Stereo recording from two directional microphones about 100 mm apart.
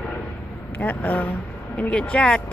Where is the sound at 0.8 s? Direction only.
15° left (ahead or behind).